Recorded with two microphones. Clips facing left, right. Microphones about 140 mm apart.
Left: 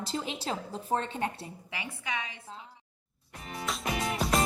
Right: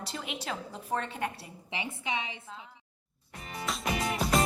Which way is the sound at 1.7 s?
20° right (ahead or behind).